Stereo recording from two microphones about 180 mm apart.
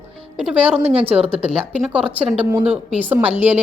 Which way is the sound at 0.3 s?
5° right (ahead or behind).